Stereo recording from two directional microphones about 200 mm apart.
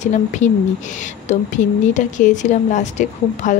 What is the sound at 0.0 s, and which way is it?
A woman's voice, 35° left (ahead or behind).